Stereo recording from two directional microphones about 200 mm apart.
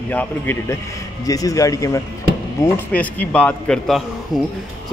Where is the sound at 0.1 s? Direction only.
10° left (ahead or behind).